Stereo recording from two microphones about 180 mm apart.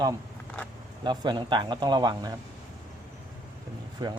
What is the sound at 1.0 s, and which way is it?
Speech, 25° right (ahead or behind).